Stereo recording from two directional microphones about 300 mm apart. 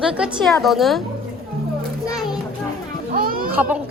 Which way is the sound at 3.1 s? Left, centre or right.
Right.